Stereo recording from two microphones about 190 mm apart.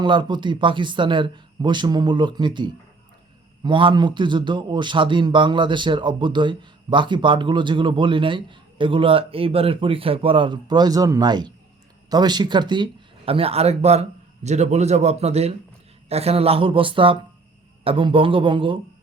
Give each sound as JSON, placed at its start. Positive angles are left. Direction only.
{"t": 0.0, "sound": "a man's voice", "side_deg": -25}